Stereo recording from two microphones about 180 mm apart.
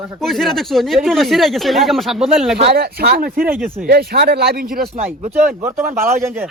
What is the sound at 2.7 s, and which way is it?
Speech, 60° right (ahead or behind).